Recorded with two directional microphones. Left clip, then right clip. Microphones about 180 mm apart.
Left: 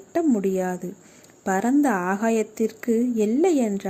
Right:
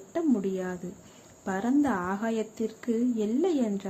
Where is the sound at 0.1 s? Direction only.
25° left (ahead or behind).